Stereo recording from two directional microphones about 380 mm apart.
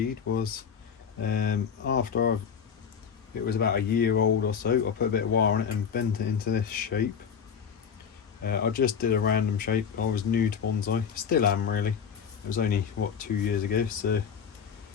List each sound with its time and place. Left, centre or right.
0.3 s speech: left
3.4 s speech: left
8.4 s speech: left